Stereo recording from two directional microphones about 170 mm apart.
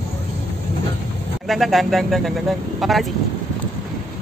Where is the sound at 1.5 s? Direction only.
Centre (ahead or behind).